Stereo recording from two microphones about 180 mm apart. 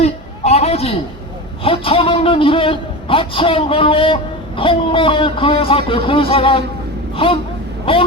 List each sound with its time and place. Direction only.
0.0 s a sound: 35° left (ahead or behind)
1.6 s a man's voice: 30° left (ahead or behind)
7.9 s a man's voice: 30° left (ahead or behind)